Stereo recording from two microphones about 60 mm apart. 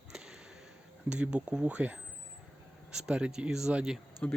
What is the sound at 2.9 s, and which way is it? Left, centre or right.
Speech, centre.